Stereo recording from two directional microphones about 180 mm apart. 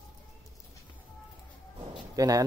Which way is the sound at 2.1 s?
20° right (ahead or behind).